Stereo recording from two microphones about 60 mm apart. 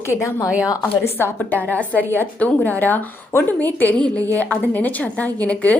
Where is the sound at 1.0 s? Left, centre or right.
Left.